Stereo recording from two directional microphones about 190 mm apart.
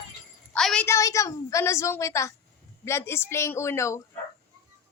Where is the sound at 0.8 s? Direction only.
15° left (ahead or behind).